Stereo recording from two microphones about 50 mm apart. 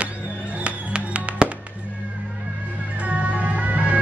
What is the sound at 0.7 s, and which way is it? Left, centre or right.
Music, right.